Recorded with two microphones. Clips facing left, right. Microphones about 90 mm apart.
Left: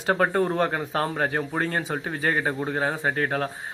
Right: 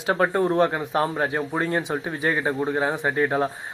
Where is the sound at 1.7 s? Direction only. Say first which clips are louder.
Right 3 dB; 15° right (ahead or behind).